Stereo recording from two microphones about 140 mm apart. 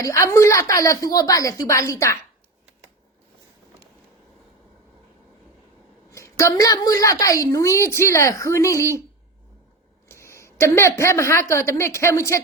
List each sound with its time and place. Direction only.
0.0 s a woman's voice: 20° left (ahead or behind)
6.1 s a woman's voice: 20° left (ahead or behind)
10.1 s a woman's voice: 20° left (ahead or behind)